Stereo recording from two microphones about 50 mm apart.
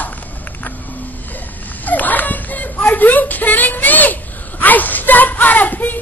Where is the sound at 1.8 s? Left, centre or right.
Left.